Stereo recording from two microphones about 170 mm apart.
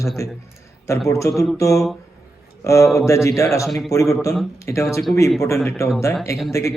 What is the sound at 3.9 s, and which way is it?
A man's voice, 20° left (ahead or behind).